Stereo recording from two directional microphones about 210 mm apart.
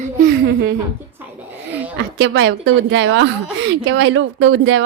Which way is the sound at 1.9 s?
60° right (ahead or behind).